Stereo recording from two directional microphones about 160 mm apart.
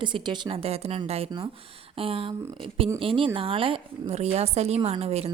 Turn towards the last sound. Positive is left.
turn(degrees=-40)  # may be behind; listen again after turning